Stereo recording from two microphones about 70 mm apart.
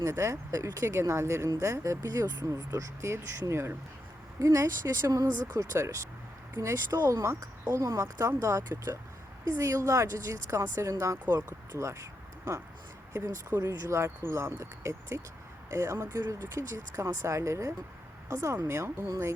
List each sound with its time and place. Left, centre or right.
0.0 s speech: right
1.5 s speech: right
13.6 s speech: right